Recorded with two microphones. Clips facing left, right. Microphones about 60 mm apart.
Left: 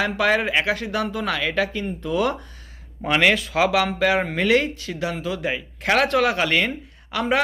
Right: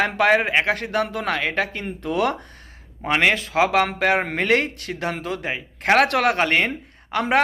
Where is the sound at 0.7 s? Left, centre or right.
Right.